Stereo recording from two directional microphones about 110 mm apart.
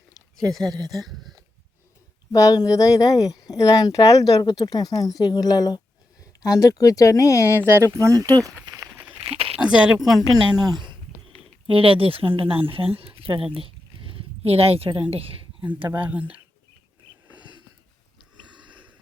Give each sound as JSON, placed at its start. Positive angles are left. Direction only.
{"t": 0.9, "sound": "speech", "side_deg": 0}
{"t": 2.3, "sound": "speech", "side_deg": 35}
{"t": 7.6, "sound": "speech", "side_deg": -25}
{"t": 8.4, "sound": "a sound", "side_deg": -30}
{"t": 9.2, "sound": "a sound", "side_deg": -65}
{"t": 9.6, "sound": "speech", "side_deg": -5}
{"t": 10.6, "sound": "speech", "side_deg": -40}
{"t": 11.7, "sound": "speech", "side_deg": -55}
{"t": 12.7, "sound": "a sound", "side_deg": -55}
{"t": 15.1, "sound": "speech", "side_deg": -60}
{"t": 16.0, "sound": "speech", "side_deg": -15}
{"t": 17.3, "sound": "a sound", "side_deg": -40}